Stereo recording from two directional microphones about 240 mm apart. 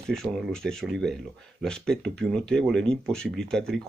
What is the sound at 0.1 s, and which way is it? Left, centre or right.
Speech, centre.